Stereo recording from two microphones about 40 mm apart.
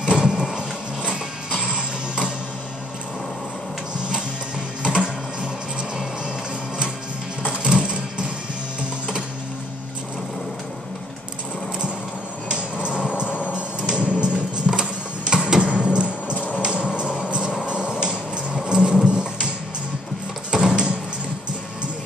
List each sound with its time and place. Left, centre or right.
0.0 s a sound: right
1.1 s music: right
4.8 s a sound: right
7.6 s music: right
12.4 s hammer: right
13.5 s music: right
16.5 s a sound: right
17.6 s music: right
20.5 s music: right